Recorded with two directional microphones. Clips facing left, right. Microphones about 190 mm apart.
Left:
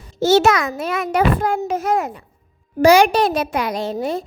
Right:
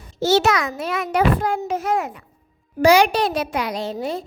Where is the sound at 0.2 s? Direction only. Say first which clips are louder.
Left 3 dB; 50° left (ahead or behind).